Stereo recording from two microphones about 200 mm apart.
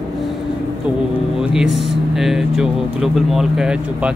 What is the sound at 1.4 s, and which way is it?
Speech, centre (ahead or behind).